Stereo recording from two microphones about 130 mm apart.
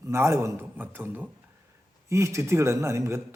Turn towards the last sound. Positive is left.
turn(degrees=-20)  # may be behind; listen again after turning